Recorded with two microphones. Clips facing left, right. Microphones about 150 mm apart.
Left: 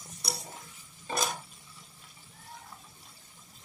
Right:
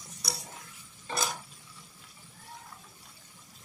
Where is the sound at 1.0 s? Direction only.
20° left (ahead or behind).